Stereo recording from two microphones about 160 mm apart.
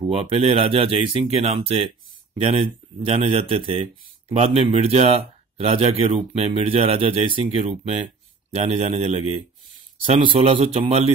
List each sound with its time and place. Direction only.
0.0 s speech: 35° right (ahead or behind)
10.2 s speech: 35° right (ahead or behind)